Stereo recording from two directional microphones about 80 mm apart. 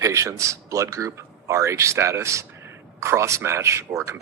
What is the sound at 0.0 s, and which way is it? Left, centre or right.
Speech, right.